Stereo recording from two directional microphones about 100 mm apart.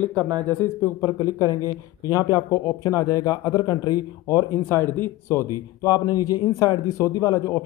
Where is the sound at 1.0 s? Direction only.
35° left (ahead or behind).